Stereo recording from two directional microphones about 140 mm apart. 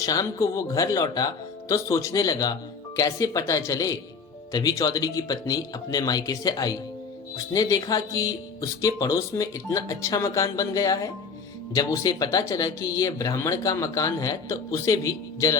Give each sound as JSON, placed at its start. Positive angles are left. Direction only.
{"t": 0.0, "sound": "speech", "side_deg": 25}